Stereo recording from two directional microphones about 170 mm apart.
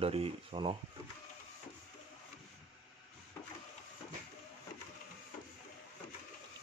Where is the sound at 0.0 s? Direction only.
35° right (ahead or behind).